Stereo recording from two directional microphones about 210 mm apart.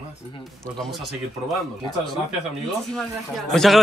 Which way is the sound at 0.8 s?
Centre (ahead or behind).